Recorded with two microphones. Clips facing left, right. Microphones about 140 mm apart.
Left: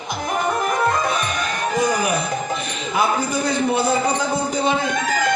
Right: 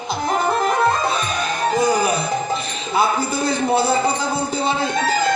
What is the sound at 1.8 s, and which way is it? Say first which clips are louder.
Music: right 2 dB; 35° right (ahead or behind).